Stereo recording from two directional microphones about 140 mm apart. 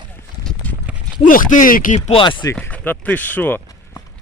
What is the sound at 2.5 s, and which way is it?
Speech, 10° left (ahead or behind).